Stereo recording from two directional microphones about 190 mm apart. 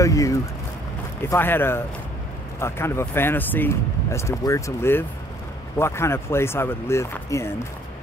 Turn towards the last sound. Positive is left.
turn(degrees=15)  # may be behind; listen again after turning